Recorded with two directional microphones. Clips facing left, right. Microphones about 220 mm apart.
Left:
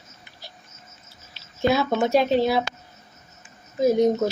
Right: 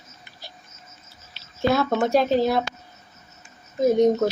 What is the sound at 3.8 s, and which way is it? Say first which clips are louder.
Speech: right 1 dB; centre (ahead or behind).